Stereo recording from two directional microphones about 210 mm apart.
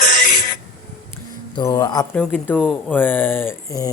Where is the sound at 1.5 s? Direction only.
20° left (ahead or behind).